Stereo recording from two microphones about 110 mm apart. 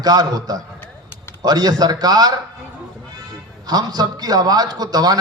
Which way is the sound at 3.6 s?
35° right (ahead or behind).